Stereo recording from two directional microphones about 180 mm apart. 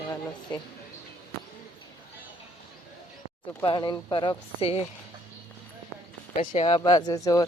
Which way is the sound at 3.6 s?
25° left (ahead or behind).